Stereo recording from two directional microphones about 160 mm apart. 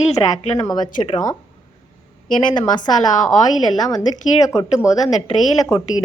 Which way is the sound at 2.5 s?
30° left (ahead or behind).